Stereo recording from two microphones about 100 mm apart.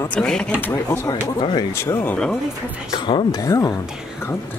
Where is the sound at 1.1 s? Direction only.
45° left (ahead or behind).